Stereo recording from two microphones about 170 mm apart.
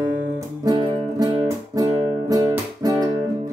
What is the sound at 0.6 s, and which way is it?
Music, 25° right (ahead or behind).